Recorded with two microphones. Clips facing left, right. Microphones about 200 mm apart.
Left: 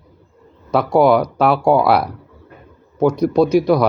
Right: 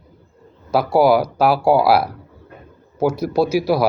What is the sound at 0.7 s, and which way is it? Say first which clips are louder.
Speech: left 1 dB; 5° right (ahead or behind).